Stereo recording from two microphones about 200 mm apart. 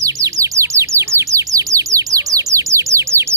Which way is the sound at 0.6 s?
15° right (ahead or behind).